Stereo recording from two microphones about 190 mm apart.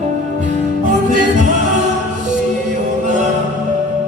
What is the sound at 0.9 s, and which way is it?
Music, 40° right (ahead or behind).